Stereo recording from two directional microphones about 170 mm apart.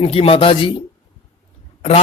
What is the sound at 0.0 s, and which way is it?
Speech, 35° left (ahead or behind).